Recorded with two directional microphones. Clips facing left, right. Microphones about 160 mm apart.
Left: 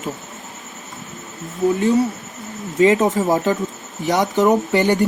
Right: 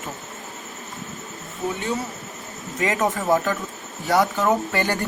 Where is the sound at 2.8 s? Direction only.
25° left (ahead or behind).